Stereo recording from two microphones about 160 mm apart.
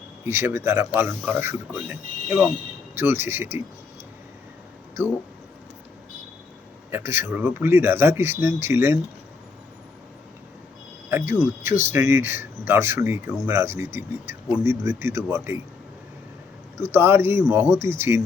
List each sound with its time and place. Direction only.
0.3 s speech: 15° right (ahead or behind)
6.9 s speech: 15° right (ahead or behind)
11.6 s speech: 15° right (ahead or behind)
16.7 s speech: 15° right (ahead or behind)